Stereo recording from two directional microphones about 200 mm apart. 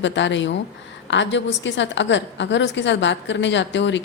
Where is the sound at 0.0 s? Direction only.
65° left (ahead or behind).